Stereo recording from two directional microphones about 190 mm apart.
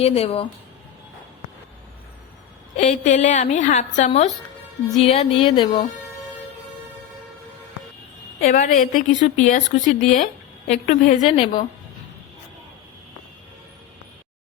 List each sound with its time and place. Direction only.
0.0 s a woman's voice: 30° left (ahead or behind)
2.7 s a woman's voice: 40° left (ahead or behind)
8.4 s a woman's voice: 45° left (ahead or behind)